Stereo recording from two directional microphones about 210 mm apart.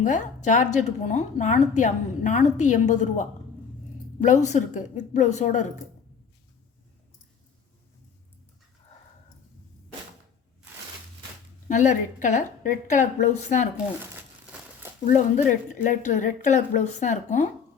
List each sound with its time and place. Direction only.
0.0 s a woman's voice: 35° left (ahead or behind)
11.7 s a woman's voice: 35° left (ahead or behind)
14.0 s crumpling: 5° right (ahead or behind)
15.0 s a woman's voice: 35° left (ahead or behind)